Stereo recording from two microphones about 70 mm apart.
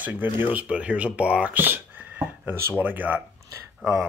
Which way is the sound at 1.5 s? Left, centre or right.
Right.